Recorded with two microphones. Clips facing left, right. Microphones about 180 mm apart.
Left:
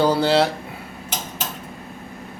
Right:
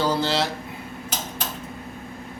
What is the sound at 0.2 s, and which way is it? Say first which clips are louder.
Speech: left 6 dB; 55° left (ahead or behind).